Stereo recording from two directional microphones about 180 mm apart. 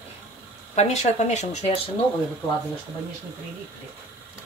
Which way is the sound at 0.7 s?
40° left (ahead or behind).